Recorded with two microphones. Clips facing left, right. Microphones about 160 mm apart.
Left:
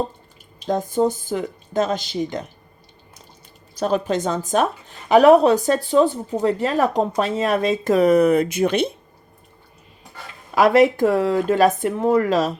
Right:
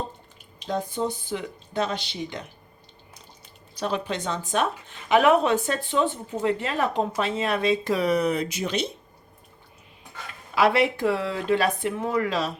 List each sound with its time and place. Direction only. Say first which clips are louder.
0.7 s speech: left 8 dB; 45° left (ahead or behind)
3.8 s a woman's voice: left 7 dB; 45° left (ahead or behind)
10.5 s speech: left 7 dB; 45° left (ahead or behind)